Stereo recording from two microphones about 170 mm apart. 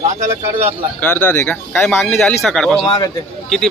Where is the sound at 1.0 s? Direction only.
10° left (ahead or behind).